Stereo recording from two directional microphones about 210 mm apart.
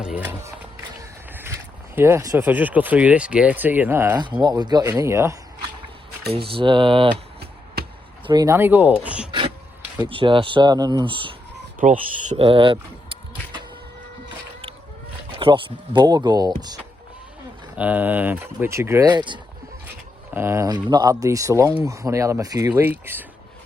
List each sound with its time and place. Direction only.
0.0 s a sound: 5° right (ahead or behind)
2.0 s speech: 10° right (ahead or behind)
4.2 s speech: 20° right (ahead or behind)
6.3 s speech: 25° right (ahead or behind)
7.8 s chop: 50° right (ahead or behind)
8.3 s speech: 15° right (ahead or behind)
10.1 s speech: 25° right (ahead or behind)
11.8 s speech: 35° right (ahead or behind)
15.4 s speech: 25° right (ahead or behind)
17.7 s speech: 10° right (ahead or behind)